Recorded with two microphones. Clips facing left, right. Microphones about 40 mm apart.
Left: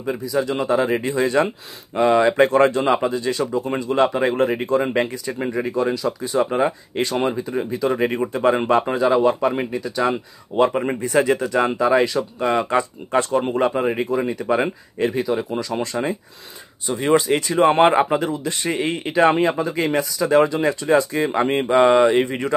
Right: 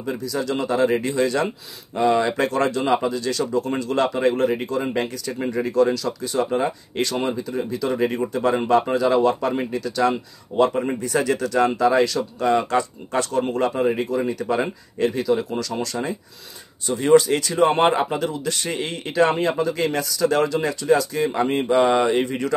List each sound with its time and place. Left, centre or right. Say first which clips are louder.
0.0 s speech: left 3 dB; centre